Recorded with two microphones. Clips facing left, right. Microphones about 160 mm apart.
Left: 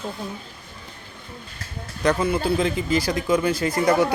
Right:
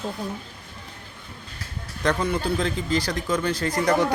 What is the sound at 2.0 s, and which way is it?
Speech, 5° left (ahead or behind).